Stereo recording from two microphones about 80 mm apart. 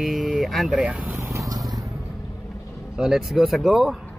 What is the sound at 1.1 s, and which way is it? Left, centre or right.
Vehicle, right.